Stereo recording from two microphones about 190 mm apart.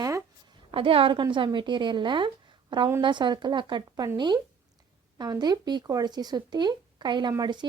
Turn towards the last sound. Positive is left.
turn(degrees=-25)  # may be behind; listen again after turning